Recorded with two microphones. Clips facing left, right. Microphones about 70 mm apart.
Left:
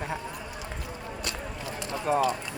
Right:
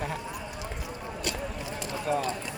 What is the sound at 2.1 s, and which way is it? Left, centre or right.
Speech, left.